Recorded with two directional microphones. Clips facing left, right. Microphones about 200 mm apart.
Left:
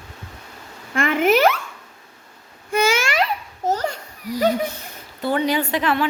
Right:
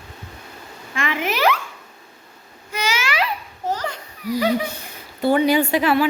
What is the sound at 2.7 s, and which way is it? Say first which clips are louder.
Babbling: left 5 dB; 50° left (ahead or behind).